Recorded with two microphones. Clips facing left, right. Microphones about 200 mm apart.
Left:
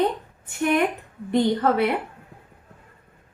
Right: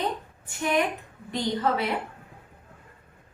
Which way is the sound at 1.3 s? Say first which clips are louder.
Left 6 dB; 55° left (ahead or behind).